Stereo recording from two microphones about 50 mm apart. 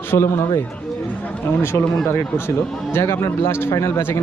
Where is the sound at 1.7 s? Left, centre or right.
Left.